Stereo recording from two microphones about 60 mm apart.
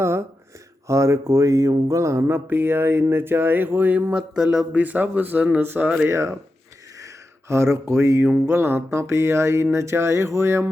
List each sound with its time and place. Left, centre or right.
0.0 s speech: right
0.9 s a sound: right
4.7 s speech: right
6.1 s music: right
7.0 s speech: right
8.4 s music: right